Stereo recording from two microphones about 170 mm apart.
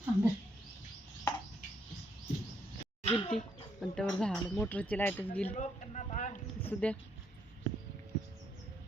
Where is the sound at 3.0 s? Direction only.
35° left (ahead or behind).